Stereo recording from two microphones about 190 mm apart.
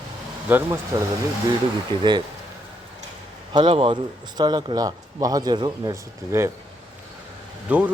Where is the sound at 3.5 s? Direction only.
25° right (ahead or behind).